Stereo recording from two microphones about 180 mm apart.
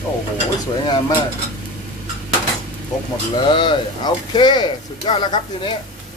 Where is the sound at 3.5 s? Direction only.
25° left (ahead or behind).